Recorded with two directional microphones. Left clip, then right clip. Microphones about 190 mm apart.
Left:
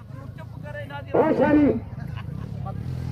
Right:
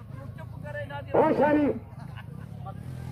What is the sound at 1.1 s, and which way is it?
Speech, 20° right (ahead or behind).